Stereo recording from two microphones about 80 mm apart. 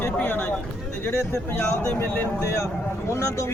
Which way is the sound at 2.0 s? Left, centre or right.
Left.